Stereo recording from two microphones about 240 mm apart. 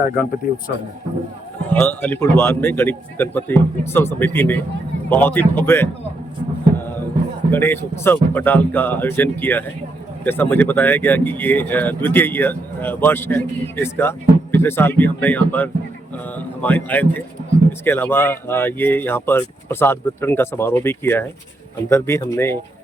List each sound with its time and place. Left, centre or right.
0.4 s speech: left
1.7 s speech: centre
6.7 s a sound: centre
7.5 s speech: centre